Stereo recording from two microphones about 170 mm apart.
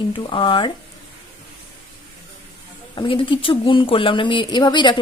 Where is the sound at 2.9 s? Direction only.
30° left (ahead or behind).